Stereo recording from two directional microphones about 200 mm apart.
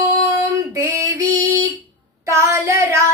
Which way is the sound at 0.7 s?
15° right (ahead or behind).